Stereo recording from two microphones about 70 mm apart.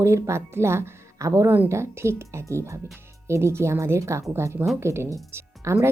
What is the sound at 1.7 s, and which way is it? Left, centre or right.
A woman's voice, right.